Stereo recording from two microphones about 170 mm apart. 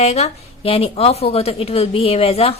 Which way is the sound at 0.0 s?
40° left (ahead or behind).